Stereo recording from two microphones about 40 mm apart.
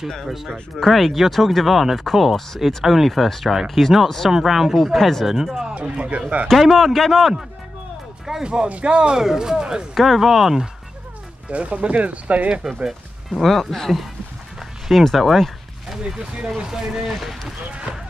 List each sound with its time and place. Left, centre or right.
0.8 s speech: centre
2.8 s speech: centre
5.2 s speech: centre
5.7 s speech: right
6.6 s speech: centre
8.6 s speech: right
9.2 s speech: centre
9.9 s speech: centre
11.5 s speech: right
13.3 s speech: centre
14.6 s a sound: centre
16.4 s speech: centre
17.0 s speech: centre